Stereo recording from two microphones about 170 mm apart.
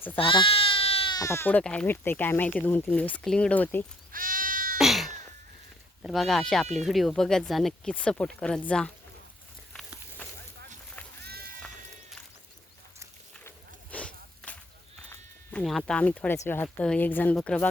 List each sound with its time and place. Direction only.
0.2 s speech: 30° left (ahead or behind); by 3.8 s 10° left (ahead or behind)
4.1 s sheep: 55° right (ahead or behind)
4.8 s a sound: centre (ahead or behind)
6.0 s speech: centre (ahead or behind)
10.2 s vehicle: 10° left (ahead or behind)
11.2 s sheep: 65° right (ahead or behind)
15.6 s speech: 5° left (ahead or behind)